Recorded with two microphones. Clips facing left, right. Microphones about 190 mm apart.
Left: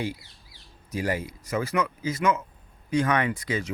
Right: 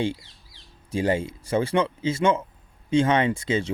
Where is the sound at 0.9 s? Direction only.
25° right (ahead or behind).